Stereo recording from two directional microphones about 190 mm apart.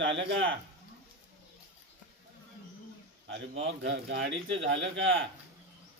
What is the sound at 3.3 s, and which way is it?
A man's voice, 70° right (ahead or behind).